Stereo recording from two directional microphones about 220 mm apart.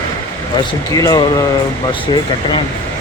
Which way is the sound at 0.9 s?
15° left (ahead or behind).